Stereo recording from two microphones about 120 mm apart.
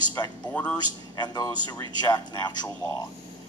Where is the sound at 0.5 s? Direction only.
10° left (ahead or behind).